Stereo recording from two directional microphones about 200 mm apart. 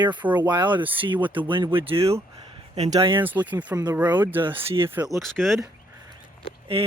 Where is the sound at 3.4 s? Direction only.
10° right (ahead or behind).